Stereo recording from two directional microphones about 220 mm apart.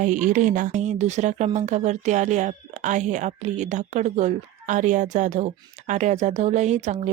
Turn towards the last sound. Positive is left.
turn(degrees=-30)  # may be behind; listen again after turning